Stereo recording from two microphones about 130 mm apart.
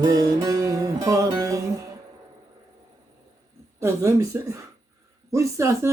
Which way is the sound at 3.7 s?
20° right (ahead or behind).